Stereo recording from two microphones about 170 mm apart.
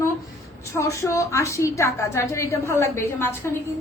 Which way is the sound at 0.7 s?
15° left (ahead or behind).